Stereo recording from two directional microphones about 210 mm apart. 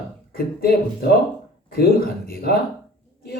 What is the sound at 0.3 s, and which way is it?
Speech, 45° left (ahead or behind).